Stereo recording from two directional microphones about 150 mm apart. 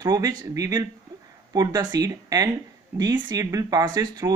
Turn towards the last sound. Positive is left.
turn(degrees=-25)  # may be behind; listen again after turning